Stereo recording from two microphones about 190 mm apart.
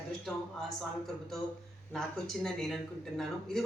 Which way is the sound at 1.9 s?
Centre (ahead or behind).